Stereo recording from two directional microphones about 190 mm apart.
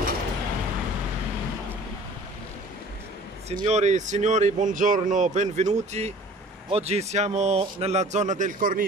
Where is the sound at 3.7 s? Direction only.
35° right (ahead or behind).